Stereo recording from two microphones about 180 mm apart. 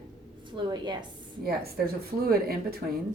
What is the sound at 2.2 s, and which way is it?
Speech, 60° right (ahead or behind).